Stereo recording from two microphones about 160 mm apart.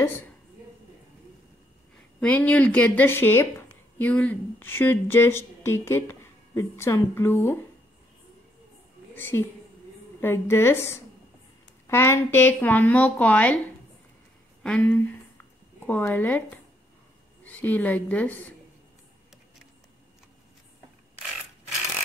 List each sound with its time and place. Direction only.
0.0 s a woman's voice: 15° left (ahead or behind)
2.1 s a woman's voice: 10° left (ahead or behind)
9.1 s a woman's voice: 15° left (ahead or behind)
14.6 s a woman's voice: 10° left (ahead or behind)
17.5 s a woman's voice: 10° left (ahead or behind)